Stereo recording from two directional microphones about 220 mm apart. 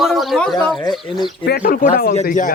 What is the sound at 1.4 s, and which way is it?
Speech, 45° left (ahead or behind).